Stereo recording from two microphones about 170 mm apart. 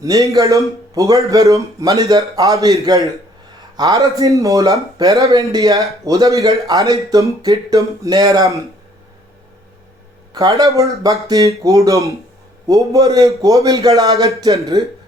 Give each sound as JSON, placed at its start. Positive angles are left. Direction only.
{"t": 0.0, "sound": "a man's voice", "side_deg": -20}
{"t": 10.3, "sound": "a man's voice", "side_deg": -20}